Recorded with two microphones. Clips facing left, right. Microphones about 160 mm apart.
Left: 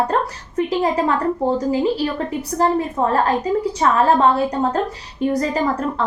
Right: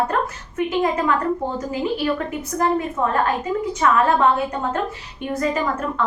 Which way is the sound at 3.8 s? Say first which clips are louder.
Left 1 dB; 35° left (ahead or behind).